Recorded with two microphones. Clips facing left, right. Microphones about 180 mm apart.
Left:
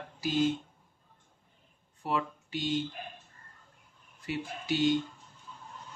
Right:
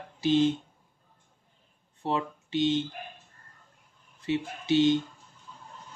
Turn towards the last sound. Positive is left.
turn(degrees=-25)  # may be behind; listen again after turning